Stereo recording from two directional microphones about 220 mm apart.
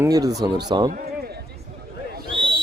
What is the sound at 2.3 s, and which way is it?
Owl, 25° right (ahead or behind).